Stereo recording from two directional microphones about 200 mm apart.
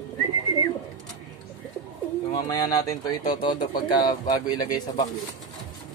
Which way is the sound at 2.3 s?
20° left (ahead or behind).